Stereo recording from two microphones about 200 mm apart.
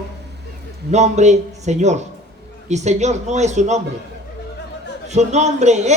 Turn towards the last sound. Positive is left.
turn(degrees=-35)  # may be behind; listen again after turning